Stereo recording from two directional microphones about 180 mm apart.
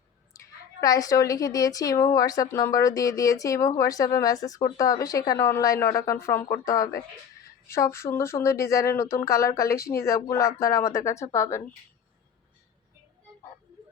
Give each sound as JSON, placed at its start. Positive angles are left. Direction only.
{"t": 0.3, "sound": "a woman's voice", "side_deg": 20}